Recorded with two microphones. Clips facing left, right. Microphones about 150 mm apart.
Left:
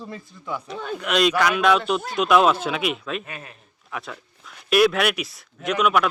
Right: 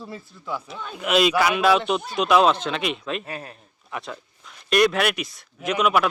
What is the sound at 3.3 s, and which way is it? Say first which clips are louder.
Speech: right 4 dB; 35° right (ahead or behind).